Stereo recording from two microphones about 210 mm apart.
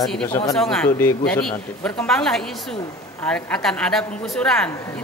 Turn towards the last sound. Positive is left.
turn(degrees=5)  # may be behind; listen again after turning